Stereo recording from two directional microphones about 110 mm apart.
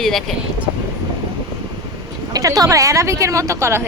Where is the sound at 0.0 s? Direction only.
Centre (ahead or behind).